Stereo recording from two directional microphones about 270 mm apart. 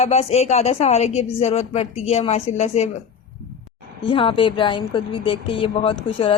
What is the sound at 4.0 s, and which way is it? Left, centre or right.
Speech, centre.